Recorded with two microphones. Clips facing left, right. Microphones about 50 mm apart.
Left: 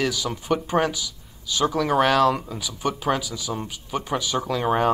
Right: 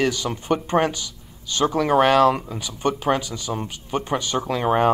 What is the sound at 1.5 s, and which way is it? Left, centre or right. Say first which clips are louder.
Speech: right 2 dB; right.